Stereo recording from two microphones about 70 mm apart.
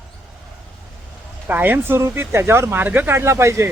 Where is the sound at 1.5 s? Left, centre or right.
Right.